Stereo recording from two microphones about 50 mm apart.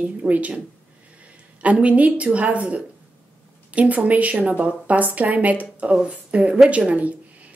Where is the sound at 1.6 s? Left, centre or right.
Right.